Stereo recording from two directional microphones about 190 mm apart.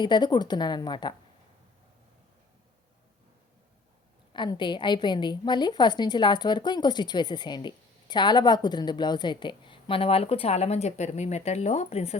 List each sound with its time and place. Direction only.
0.0 s a woman's voice: 25° left (ahead or behind)
4.3 s a woman's voice: 25° left (ahead or behind)